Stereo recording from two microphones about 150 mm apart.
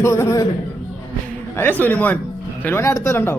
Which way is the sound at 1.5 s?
10° left (ahead or behind).